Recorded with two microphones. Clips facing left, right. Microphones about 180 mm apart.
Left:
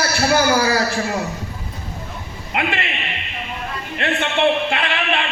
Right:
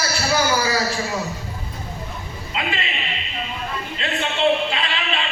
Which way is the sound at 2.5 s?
60° left (ahead or behind).